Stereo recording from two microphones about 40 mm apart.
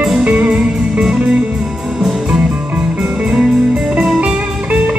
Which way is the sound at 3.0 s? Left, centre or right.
Right.